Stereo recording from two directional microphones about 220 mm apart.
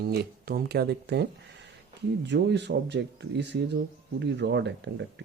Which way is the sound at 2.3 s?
50° right (ahead or behind).